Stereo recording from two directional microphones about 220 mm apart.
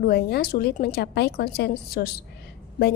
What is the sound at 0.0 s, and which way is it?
A woman's voice, 45° left (ahead or behind).